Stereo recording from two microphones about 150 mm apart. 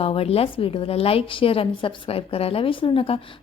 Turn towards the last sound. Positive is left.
turn(degrees=40)  # may be behind; listen again after turning